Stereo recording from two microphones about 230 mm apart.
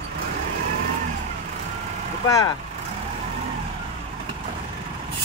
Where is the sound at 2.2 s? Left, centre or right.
Centre.